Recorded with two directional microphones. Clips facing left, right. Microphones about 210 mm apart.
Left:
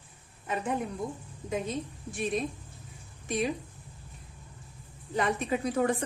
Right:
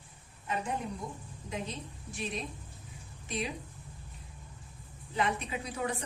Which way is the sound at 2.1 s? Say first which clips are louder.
Left 7 dB; 50° left (ahead or behind).